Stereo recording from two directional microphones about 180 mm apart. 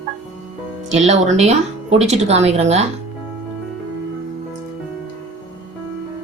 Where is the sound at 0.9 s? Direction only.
40° right (ahead or behind).